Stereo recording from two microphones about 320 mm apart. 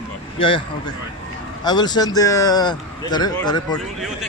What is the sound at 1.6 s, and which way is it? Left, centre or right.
Speech, centre.